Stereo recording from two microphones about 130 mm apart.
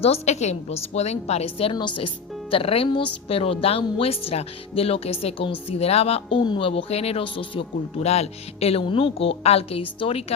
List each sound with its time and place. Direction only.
0.0 s a woman's voice: 55° left (ahead or behind)
1.7 s speech: 35° left (ahead or behind)
6.4 s speech: 40° left (ahead or behind)